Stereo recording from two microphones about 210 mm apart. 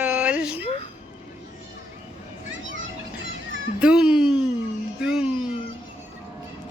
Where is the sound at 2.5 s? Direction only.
65° right (ahead or behind).